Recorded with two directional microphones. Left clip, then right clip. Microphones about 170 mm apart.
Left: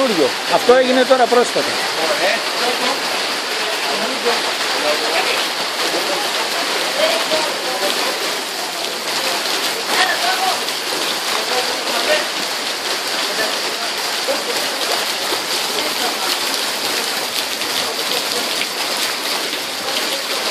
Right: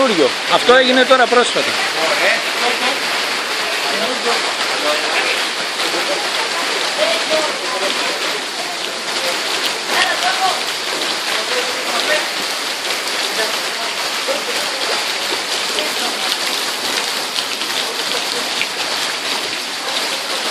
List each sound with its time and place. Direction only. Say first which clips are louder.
0.7 s speech: right 1 dB; 5° right (ahead or behind)